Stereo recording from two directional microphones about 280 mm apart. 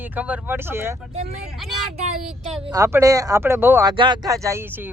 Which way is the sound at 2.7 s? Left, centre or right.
Centre.